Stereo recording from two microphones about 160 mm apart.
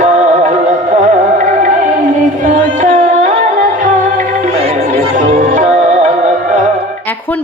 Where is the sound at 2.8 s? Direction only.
50° right (ahead or behind).